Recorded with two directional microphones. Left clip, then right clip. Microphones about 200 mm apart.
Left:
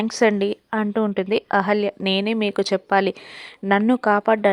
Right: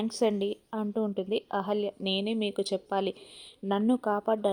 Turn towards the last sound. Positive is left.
turn(degrees=20)  # may be behind; listen again after turning